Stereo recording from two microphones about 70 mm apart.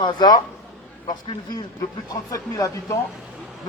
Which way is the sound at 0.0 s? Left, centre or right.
Left.